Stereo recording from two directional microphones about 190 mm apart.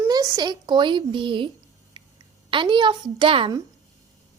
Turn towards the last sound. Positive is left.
turn(degrees=-25)  # may be behind; listen again after turning